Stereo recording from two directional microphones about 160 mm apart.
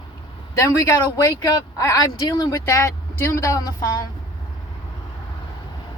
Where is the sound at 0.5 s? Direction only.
20° left (ahead or behind).